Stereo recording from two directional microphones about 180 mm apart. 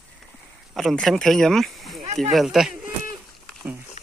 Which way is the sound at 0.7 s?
Centre (ahead or behind).